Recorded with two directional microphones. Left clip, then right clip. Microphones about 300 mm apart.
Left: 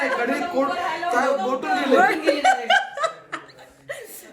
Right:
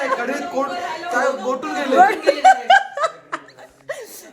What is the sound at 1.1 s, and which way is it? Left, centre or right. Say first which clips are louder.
Chuckle: right 2 dB; centre.